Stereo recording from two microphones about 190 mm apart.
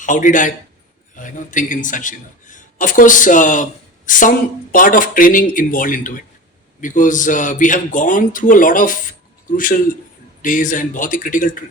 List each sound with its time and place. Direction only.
0.0 s a man's voice: 40° left (ahead or behind)